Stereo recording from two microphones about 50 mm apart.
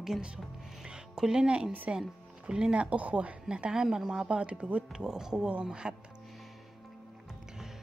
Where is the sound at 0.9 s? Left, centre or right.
Centre.